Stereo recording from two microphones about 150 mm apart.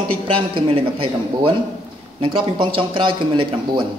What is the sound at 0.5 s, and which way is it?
Speech, 40° right (ahead or behind).